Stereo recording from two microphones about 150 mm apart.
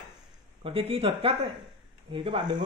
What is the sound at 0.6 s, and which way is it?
A man's voice, 40° right (ahead or behind).